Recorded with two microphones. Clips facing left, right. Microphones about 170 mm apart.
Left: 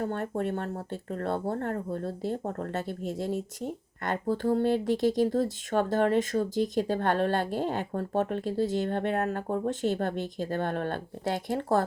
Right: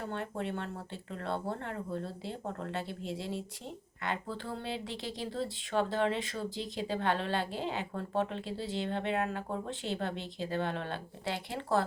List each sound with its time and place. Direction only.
0.0 s speech: 45° left (ahead or behind)